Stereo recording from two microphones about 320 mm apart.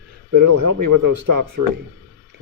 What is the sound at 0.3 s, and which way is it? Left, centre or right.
Speech, right.